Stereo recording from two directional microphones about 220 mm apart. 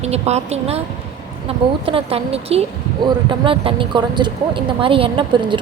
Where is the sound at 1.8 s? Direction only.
25° right (ahead or behind).